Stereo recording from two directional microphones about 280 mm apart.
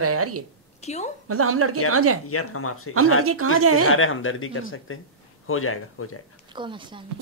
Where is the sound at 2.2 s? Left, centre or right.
Left.